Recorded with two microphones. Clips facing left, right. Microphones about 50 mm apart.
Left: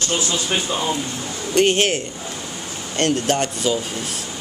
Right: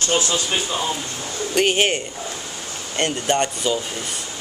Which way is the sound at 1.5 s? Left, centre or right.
Centre.